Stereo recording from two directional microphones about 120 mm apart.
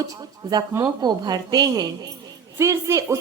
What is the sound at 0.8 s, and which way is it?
A woman's voice, 35° right (ahead or behind).